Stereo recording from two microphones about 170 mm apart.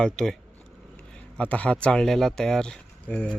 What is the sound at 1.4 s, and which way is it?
Speech, 10° left (ahead or behind).